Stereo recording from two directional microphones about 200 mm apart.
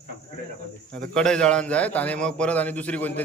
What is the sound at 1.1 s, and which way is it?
A man's voice, 5° left (ahead or behind).